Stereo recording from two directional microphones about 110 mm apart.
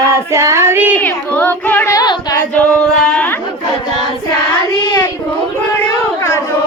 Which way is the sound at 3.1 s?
10° left (ahead or behind).